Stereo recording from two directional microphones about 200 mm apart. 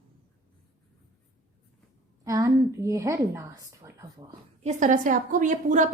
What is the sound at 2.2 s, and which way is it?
A woman's voice, 15° right (ahead or behind).